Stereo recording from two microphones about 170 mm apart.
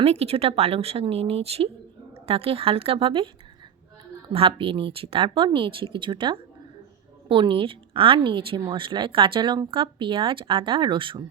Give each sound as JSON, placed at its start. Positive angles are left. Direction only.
{"t": 0.0, "sound": "a woman's voice", "side_deg": -35}
{"t": 4.3, "sound": "a woman's voice", "side_deg": -35}